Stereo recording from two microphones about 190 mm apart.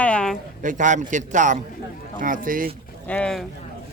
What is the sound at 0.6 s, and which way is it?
A man's voice, 40° right (ahead or behind).